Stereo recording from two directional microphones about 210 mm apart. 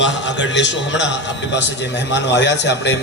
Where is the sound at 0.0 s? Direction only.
60° left (ahead or behind).